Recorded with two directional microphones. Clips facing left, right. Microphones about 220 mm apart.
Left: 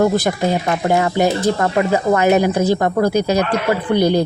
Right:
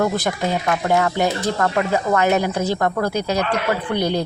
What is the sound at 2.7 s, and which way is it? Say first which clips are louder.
Speech: left 5 dB; 15° left (ahead or behind).